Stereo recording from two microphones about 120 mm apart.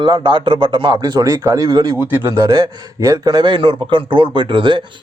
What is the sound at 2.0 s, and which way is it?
Speech, 20° right (ahead or behind).